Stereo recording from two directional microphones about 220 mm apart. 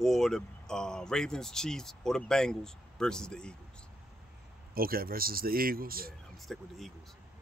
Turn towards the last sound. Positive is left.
turn(degrees=0)  # may be behind; listen again after turning